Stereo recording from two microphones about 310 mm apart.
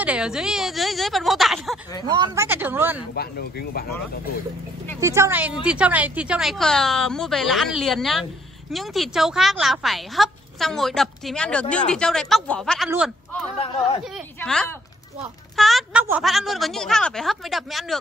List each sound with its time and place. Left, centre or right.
0.0 s a woman's voice: centre
2.0 s a woman's voice: centre
3.2 s speech: left
5.0 s a woman's voice: centre